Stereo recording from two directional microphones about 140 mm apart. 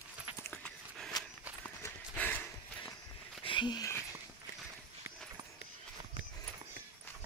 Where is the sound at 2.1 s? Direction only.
10° left (ahead or behind).